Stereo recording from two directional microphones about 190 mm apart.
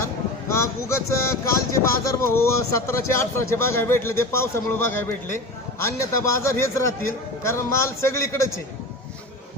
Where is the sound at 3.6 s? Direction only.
15° left (ahead or behind).